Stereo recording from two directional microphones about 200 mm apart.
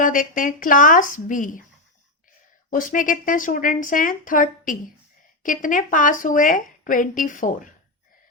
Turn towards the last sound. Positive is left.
turn(degrees=40)  # may be behind; listen again after turning